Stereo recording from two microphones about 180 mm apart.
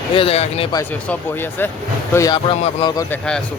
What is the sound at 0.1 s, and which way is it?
Speech, 30° left (ahead or behind).